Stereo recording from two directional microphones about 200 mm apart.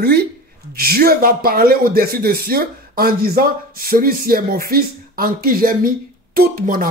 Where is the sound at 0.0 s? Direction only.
55° right (ahead or behind).